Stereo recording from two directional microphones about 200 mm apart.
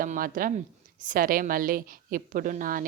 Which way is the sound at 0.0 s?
45° right (ahead or behind).